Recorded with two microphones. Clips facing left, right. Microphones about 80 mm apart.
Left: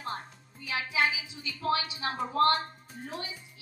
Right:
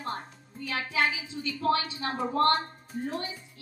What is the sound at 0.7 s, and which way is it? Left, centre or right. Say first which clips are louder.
A woman's voice: right 1 dB; centre.